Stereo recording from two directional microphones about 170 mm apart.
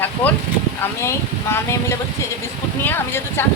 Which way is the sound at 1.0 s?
15° left (ahead or behind).